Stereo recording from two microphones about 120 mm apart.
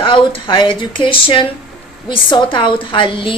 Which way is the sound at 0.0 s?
45° left (ahead or behind).